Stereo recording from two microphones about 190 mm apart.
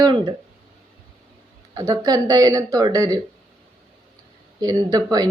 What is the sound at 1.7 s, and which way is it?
Speech, 20° right (ahead or behind).